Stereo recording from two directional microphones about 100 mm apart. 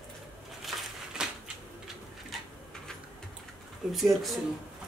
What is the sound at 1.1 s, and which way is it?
Typewriter, 5° right (ahead or behind).